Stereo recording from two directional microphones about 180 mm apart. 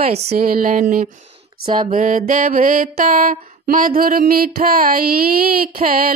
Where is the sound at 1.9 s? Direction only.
45° right (ahead or behind).